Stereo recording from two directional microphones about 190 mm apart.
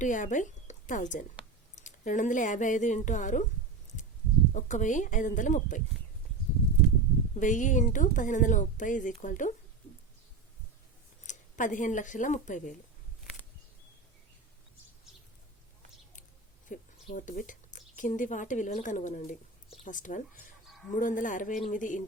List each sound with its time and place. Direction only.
0.0 s a woman's voice: 40° left (ahead or behind)
4.5 s speech: 40° left (ahead or behind)
7.3 s speech: 40° left (ahead or behind)
11.3 s speech: 40° left (ahead or behind)
16.6 s a man's voice: 45° left (ahead or behind)